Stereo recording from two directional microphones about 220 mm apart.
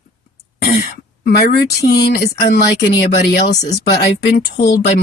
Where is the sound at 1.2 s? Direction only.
50° left (ahead or behind).